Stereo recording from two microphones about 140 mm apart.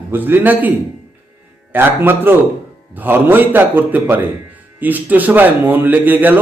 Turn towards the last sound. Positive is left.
turn(degrees=-15)  # may be behind; listen again after turning